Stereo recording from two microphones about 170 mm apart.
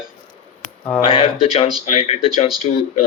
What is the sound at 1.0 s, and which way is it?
Speech, 35° left (ahead or behind).